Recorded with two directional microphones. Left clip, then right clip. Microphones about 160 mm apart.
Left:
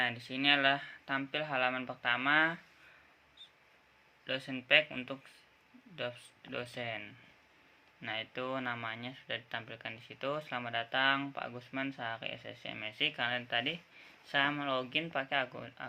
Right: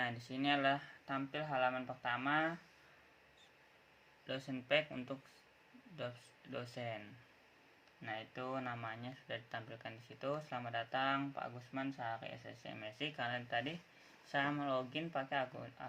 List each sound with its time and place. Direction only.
0.0 s speech: 10° left (ahead or behind)
4.3 s speech: 10° left (ahead or behind)
6.5 s speech: 10° left (ahead or behind)
8.0 s speech: 25° left (ahead or behind)